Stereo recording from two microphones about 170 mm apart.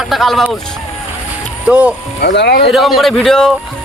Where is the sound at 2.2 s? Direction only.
80° left.